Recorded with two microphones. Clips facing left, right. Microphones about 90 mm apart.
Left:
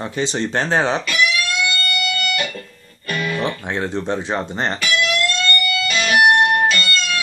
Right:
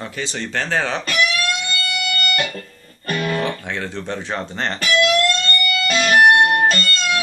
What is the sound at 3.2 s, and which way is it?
Music, 45° right (ahead or behind).